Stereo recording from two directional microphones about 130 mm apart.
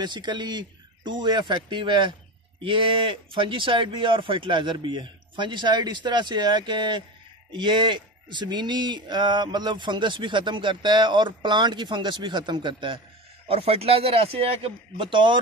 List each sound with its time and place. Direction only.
0.0 s speech: 35° right (ahead or behind)
13.5 s a man's voice: 50° right (ahead or behind)